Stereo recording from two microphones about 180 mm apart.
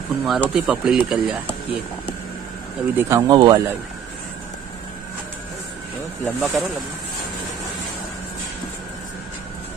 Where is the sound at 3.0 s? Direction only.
15° right (ahead or behind).